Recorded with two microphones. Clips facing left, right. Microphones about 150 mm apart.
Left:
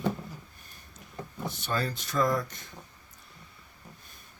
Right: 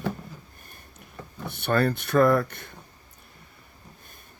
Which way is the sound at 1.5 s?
60° right (ahead or behind).